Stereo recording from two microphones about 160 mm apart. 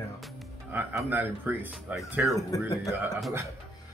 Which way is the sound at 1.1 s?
10° right (ahead or behind).